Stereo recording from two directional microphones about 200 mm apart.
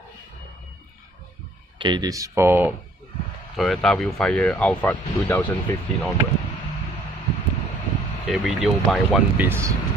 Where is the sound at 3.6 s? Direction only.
Centre (ahead or behind).